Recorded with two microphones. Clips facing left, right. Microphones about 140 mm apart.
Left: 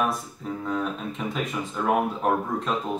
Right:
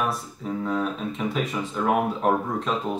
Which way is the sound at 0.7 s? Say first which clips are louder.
Right 1 dB; centre (ahead or behind).